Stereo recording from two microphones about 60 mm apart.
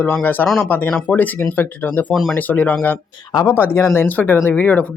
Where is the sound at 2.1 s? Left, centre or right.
Centre.